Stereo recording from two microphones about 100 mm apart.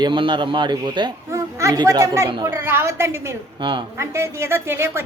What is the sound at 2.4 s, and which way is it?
Speech, 25° right (ahead or behind).